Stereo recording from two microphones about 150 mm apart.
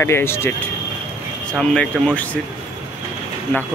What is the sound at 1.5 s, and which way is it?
Speech, 5° left (ahead or behind).